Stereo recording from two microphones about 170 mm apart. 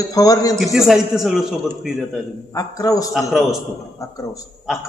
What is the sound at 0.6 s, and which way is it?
Speech, centre (ahead or behind).